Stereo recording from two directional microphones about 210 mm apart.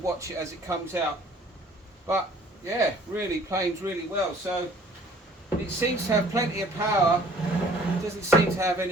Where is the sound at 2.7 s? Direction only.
15° right (ahead or behind).